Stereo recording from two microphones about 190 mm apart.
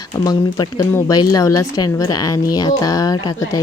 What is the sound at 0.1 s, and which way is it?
Speech, 20° left (ahead or behind).